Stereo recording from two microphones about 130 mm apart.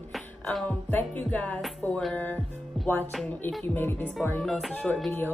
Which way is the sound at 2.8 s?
Centre (ahead or behind).